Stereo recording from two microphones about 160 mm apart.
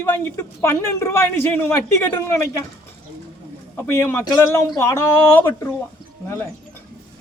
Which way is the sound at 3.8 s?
15° left (ahead or behind).